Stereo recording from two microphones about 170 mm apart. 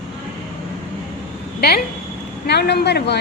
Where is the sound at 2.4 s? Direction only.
75° left (ahead or behind).